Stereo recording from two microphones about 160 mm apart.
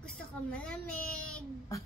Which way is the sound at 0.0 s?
5° left (ahead or behind).